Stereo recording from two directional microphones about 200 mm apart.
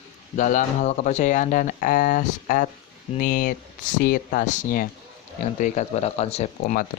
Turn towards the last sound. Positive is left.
turn(degrees=35)  # may be behind; listen again after turning